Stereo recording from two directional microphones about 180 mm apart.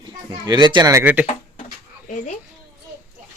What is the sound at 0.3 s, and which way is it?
Speech, 25° right (ahead or behind).